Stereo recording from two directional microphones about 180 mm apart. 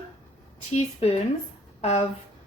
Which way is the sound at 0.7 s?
35° left (ahead or behind).